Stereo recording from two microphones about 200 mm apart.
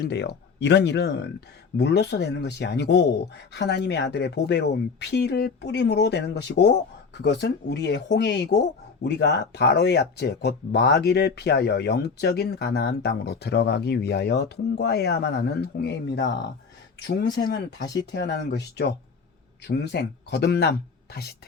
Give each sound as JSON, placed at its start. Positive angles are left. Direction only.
{"t": 0.0, "sound": "speech", "side_deg": 55}